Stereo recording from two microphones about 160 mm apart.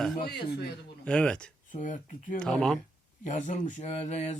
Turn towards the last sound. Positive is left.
turn(degrees=45)  # may be behind; listen again after turning